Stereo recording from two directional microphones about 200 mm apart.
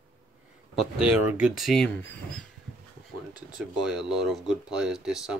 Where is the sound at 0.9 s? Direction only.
5° right (ahead or behind).